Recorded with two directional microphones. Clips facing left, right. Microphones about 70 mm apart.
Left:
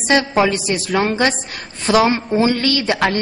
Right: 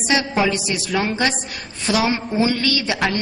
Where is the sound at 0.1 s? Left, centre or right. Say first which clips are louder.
Left 4 dB; left.